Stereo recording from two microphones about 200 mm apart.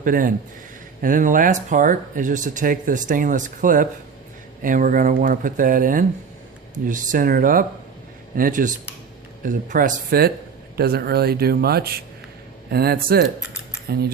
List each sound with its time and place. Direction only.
0.0 s speech: 45° right (ahead or behind)